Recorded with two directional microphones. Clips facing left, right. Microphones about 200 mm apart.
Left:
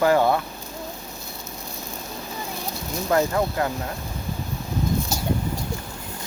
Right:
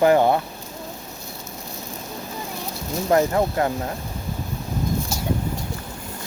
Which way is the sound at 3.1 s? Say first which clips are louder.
Right 3 dB; 30° right (ahead or behind).